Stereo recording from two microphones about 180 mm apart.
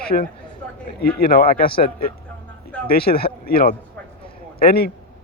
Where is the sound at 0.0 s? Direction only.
55° left (ahead or behind).